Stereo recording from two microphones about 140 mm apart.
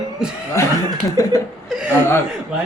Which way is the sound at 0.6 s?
20° left (ahead or behind).